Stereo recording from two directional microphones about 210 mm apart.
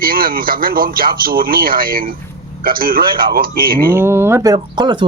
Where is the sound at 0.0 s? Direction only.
45° right (ahead or behind).